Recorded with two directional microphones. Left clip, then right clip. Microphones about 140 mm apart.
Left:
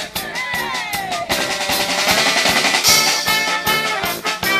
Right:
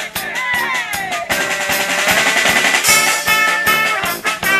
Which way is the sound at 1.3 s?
5° left (ahead or behind).